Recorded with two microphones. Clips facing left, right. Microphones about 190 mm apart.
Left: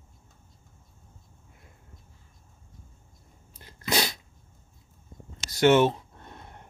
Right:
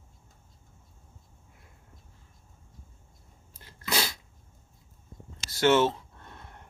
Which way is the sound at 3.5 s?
20° left (ahead or behind).